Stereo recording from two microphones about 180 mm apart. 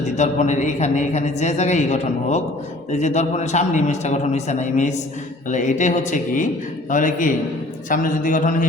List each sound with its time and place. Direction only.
0.2 s a woman's voice: 40° left (ahead or behind)